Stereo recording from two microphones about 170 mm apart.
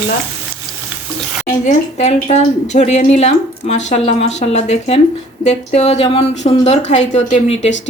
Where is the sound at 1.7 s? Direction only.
40° left (ahead or behind).